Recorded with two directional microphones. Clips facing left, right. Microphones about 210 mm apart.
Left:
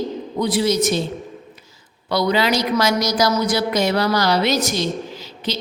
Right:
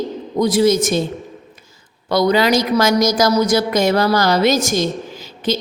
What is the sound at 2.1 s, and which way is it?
A woman's voice, 45° right (ahead or behind).